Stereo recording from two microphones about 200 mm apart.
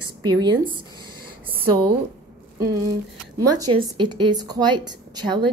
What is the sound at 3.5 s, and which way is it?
A woman's voice, 20° right (ahead or behind).